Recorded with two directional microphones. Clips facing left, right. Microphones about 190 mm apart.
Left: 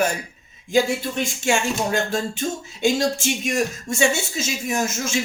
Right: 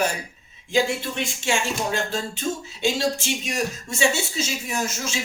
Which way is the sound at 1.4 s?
45° left (ahead or behind).